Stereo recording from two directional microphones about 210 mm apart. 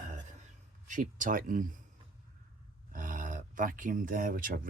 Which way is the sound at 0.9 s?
40° right (ahead or behind).